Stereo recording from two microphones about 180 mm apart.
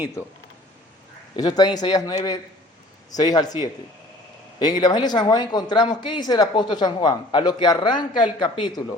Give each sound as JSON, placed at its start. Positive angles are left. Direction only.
{"t": 0.2, "sound": "speech", "side_deg": 15}
{"t": 1.4, "sound": "speech", "side_deg": 20}
{"t": 4.6, "sound": "speech", "side_deg": 20}